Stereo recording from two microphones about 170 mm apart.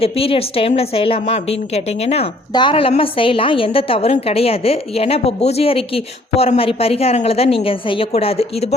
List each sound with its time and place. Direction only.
0.0 s a woman's voice: 35° left (ahead or behind)